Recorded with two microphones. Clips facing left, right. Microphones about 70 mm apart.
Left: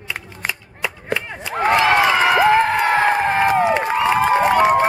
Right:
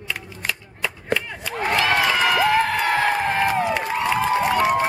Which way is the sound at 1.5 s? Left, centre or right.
Left.